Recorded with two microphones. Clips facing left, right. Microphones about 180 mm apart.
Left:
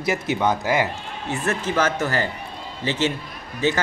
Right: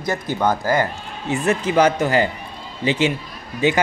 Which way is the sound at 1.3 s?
15° right (ahead or behind).